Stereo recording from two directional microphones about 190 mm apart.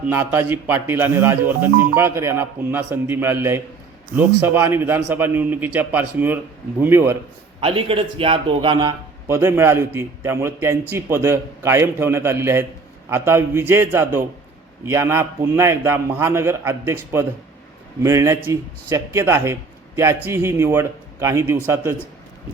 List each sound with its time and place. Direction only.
0.0 s a man's voice: 10° right (ahead or behind)
7.6 s speech: 30° right (ahead or behind)
9.2 s a man's voice: 15° right (ahead or behind)